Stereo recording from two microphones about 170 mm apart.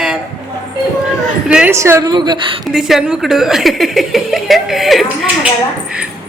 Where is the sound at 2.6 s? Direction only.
Centre (ahead or behind).